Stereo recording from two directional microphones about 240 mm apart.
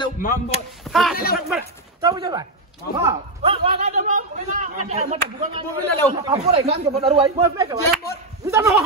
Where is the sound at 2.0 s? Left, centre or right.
Centre.